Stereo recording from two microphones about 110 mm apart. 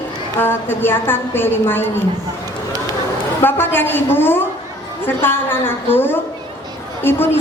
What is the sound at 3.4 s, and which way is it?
A woman's voice, 20° left (ahead or behind).